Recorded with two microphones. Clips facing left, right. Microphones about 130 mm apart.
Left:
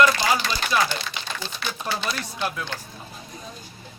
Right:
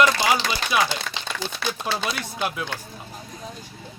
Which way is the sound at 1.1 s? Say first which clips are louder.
Right 1 dB; 90° right.